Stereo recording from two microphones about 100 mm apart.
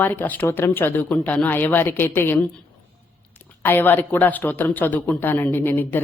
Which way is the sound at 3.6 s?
20° left (ahead or behind).